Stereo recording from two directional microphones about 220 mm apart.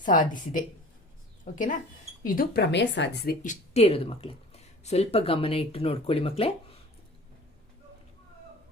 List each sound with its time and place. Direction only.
0.0 s a woman's voice: 35° left (ahead or behind)
3.4 s speech: 30° left (ahead or behind)